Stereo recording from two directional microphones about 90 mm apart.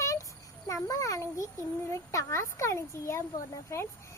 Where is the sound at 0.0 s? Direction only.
40° left (ahead or behind).